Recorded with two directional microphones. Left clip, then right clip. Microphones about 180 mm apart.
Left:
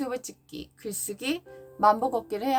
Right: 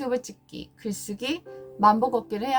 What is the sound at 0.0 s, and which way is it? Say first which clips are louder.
Speech: right 5 dB; 25° left (ahead or behind).